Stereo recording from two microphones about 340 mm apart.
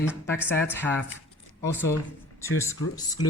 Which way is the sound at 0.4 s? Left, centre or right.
Centre.